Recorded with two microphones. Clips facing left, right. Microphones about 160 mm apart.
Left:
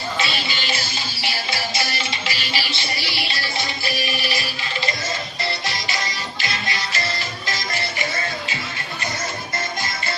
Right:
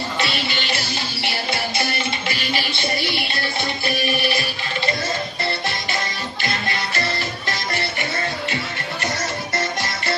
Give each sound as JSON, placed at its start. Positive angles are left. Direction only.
{"t": 0.2, "sound": "music", "side_deg": -60}
{"t": 6.4, "sound": "music", "side_deg": -55}